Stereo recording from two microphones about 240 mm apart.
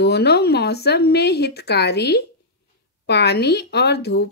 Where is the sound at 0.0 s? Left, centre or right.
Left.